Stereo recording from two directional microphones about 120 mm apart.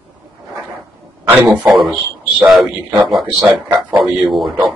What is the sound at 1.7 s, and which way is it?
Speech, centre (ahead or behind).